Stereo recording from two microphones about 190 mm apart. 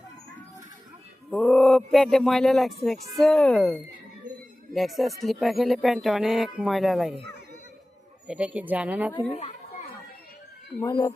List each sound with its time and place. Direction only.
1.3 s speech: centre (ahead or behind)
8.3 s speech: 5° right (ahead or behind)
9.3 s speech: 35° left (ahead or behind)
10.8 s speech: 15° left (ahead or behind)